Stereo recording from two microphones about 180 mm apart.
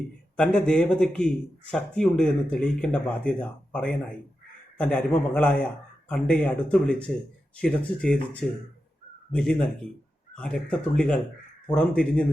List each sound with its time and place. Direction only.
0.3 s a man's voice: 5° left (ahead or behind)